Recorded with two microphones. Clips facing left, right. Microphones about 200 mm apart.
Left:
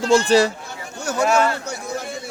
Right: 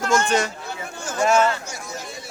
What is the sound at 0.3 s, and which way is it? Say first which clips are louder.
Speech: left 7 dB; 35° left (ahead or behind).